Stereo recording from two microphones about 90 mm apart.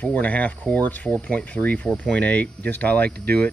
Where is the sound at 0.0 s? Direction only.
15° left (ahead or behind).